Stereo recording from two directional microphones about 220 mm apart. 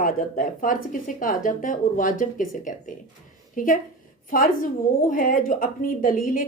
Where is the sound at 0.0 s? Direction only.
40° left (ahead or behind).